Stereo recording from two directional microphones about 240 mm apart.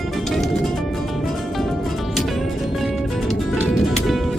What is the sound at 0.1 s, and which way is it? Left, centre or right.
Music, centre.